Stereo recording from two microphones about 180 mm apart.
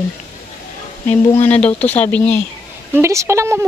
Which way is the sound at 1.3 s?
10° left (ahead or behind).